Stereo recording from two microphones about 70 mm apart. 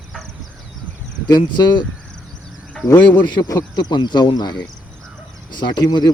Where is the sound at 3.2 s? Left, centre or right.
Left.